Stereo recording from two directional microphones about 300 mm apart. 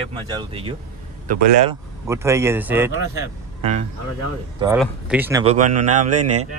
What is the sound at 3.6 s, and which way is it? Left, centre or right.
Speech, right.